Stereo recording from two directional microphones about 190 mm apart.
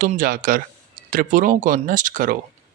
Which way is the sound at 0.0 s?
45° right (ahead or behind).